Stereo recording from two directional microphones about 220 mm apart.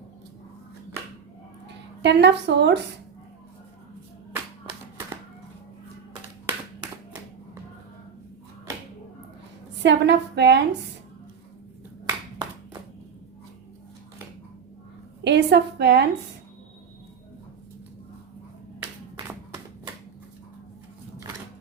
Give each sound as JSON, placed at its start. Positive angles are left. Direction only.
{"t": 1.6, "sound": "speech", "side_deg": -50}
{"t": 6.4, "sound": "clapping", "side_deg": -10}
{"t": 9.7, "sound": "a woman's voice", "side_deg": -50}
{"t": 12.0, "sound": "hands", "side_deg": -20}
{"t": 15.2, "sound": "a woman's voice", "side_deg": -50}